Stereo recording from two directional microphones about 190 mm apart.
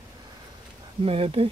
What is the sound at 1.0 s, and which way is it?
Speech, 30° right (ahead or behind).